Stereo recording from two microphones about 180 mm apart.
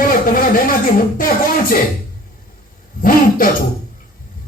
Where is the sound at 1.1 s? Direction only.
50° left (ahead or behind).